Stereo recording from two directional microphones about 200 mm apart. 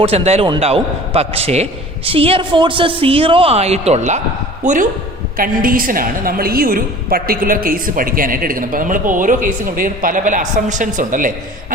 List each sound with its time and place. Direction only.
0.0 s a man's voice: 30° right (ahead or behind)